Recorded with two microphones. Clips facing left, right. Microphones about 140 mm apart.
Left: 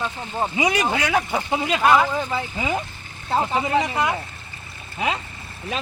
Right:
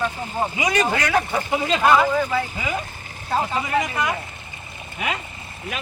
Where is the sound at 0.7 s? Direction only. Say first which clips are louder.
Right 1 dB; 15° left (ahead or behind).